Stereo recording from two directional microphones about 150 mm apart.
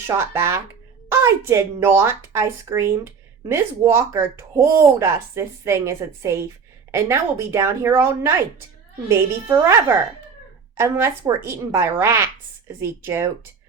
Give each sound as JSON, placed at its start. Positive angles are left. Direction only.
{"t": 0.1, "sound": "speech", "side_deg": -15}
{"t": 10.8, "sound": "speech", "side_deg": -15}